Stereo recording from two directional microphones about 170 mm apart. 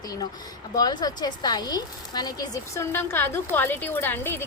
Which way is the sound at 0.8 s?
25° left (ahead or behind).